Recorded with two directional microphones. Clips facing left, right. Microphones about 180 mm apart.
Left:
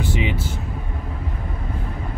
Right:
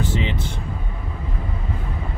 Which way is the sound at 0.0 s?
10° left (ahead or behind).